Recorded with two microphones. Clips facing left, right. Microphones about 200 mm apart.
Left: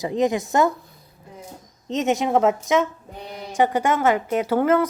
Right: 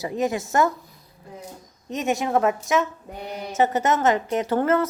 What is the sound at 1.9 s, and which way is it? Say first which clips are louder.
A woman's voice: left 3 dB; 20° left (ahead or behind).